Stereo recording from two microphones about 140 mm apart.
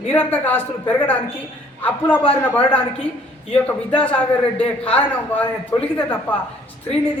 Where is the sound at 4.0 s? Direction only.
10° left (ahead or behind).